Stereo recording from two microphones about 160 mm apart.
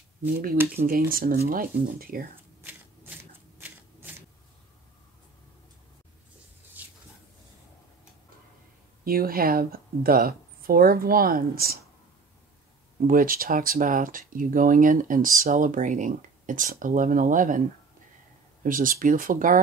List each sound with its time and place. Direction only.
0.8 s speech: 65° right (ahead or behind)
3.5 s shuffling cards: 10° right (ahead or behind)
6.8 s a sound: 10° right (ahead or behind)
9.0 s speech: 65° right (ahead or behind)
13.0 s speech: 65° right (ahead or behind)